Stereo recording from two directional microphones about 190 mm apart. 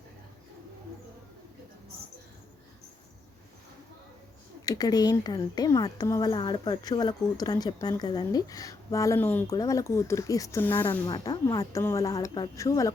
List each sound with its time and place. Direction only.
4.6 s a woman's voice: 20° left (ahead or behind)